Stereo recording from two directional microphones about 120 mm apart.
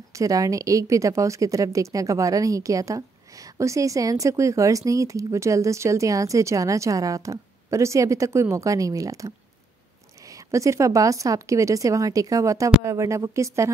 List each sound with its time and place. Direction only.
0.1 s a woman's voice: 30° right (ahead or behind)
10.3 s a woman's voice: 25° right (ahead or behind)